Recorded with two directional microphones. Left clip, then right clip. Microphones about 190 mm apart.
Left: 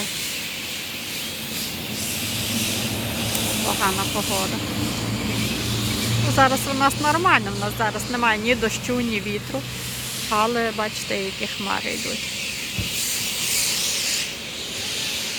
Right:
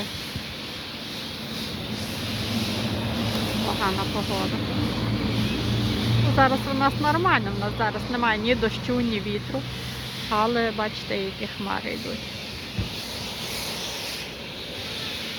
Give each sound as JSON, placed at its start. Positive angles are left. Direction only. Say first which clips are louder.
{"t": 6.3, "sound": "speech", "louder": "left 3 dB", "side_deg": 5}
{"t": 10.2, "sound": "speech", "louder": "left 2 dB", "side_deg": 0}
{"t": 13.5, "sound": "a sound", "louder": "left 9 dB", "side_deg": -40}